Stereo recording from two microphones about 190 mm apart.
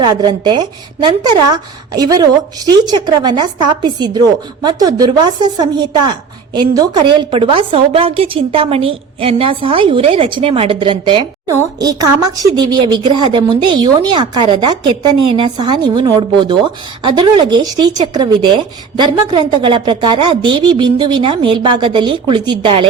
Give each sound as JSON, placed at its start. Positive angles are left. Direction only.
{"t": 0.0, "sound": "a woman's voice", "side_deg": -25}